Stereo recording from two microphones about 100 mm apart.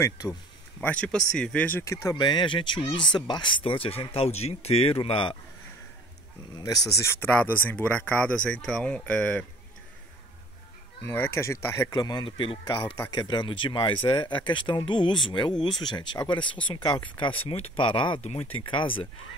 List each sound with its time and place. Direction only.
0.7 s speech: 15° left (ahead or behind)
2.1 s speech: 50° left (ahead or behind)
3.6 s speech: 70° left (ahead or behind)
6.5 s speech: 40° left (ahead or behind)
6.9 s speech: 25° left (ahead or behind)
11.1 s speech: 25° left (ahead or behind)
11.9 s speech: 45° left (ahead or behind)
12.3 s speech: 60° left (ahead or behind)
17.5 s speech: 70° left (ahead or behind)
18.3 s speech: 90° left
18.6 s speech: 55° left (ahead or behind)